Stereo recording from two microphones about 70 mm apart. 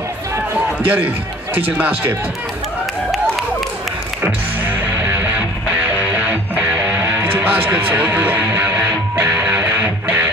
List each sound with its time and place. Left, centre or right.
0.8 s speech: right
7.3 s speech: right
9.4 s music: right